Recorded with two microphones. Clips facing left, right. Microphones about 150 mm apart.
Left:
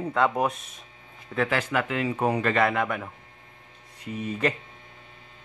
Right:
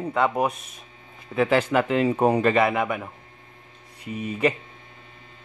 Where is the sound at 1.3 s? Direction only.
20° right (ahead or behind).